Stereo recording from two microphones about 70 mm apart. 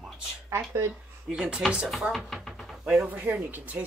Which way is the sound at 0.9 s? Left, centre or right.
Centre.